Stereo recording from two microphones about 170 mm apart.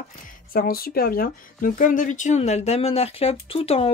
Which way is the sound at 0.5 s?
60° left (ahead or behind).